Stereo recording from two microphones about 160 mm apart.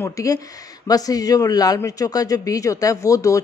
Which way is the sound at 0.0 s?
20° left (ahead or behind).